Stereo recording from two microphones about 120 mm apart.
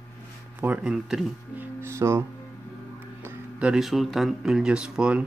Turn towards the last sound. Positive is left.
turn(degrees=-10)  # may be behind; listen again after turning